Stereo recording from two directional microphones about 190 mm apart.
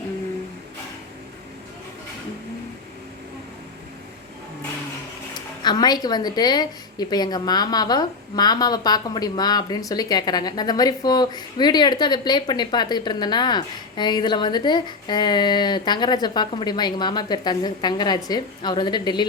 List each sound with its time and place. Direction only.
5.6 s a woman's voice: 20° left (ahead or behind)